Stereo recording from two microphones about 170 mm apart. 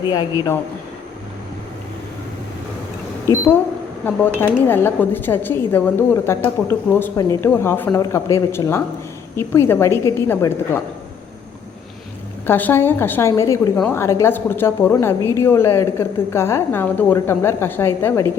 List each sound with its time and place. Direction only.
0.1 s a man's voice: 20° left (ahead or behind)
4.4 s a woman's voice: 10° left (ahead or behind)
12.5 s a woman's voice: 10° left (ahead or behind)